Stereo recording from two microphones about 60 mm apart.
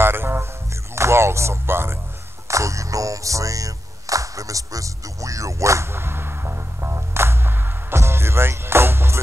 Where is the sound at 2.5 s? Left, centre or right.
Right.